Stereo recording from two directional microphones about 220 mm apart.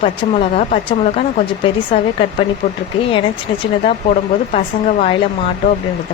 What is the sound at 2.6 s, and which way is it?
Speech, 40° left (ahead or behind).